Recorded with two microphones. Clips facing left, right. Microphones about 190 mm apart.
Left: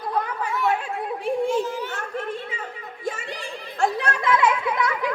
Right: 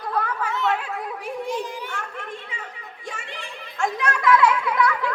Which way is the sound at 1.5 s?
15° right (ahead or behind).